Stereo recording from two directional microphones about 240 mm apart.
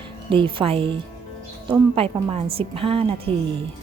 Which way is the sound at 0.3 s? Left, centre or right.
Right.